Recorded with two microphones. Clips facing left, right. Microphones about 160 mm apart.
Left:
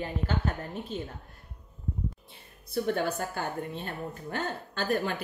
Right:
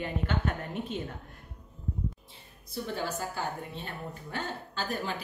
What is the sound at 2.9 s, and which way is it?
A woman's voice, 55° left (ahead or behind).